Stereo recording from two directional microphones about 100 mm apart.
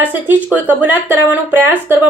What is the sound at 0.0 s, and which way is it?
Speech, 20° right (ahead or behind).